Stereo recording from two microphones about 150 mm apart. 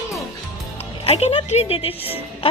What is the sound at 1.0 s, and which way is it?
Speech, 40° left (ahead or behind).